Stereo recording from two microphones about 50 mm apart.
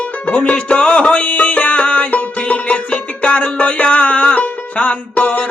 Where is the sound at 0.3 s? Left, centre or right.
Left.